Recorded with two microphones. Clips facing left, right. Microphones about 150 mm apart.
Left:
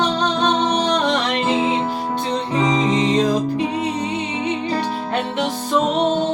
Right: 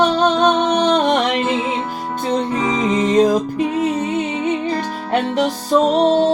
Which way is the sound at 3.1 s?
45° right (ahead or behind).